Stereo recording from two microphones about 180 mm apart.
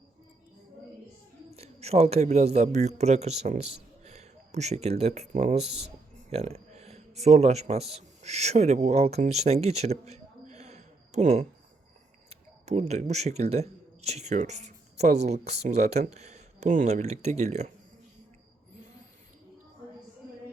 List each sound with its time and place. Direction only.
1.5 s a man's voice: 35° right (ahead or behind)